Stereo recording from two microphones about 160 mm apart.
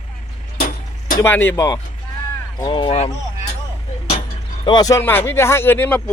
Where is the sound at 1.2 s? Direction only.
15° left (ahead or behind).